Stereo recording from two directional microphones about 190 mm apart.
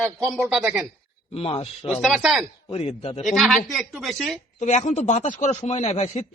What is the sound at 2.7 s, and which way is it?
Speech, 30° left (ahead or behind).